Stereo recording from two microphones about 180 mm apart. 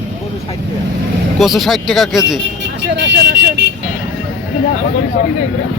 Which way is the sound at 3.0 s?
75° right (ahead or behind).